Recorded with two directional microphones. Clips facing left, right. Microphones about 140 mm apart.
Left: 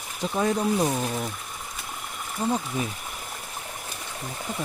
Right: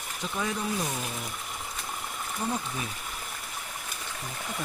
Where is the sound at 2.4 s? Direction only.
25° left (ahead or behind).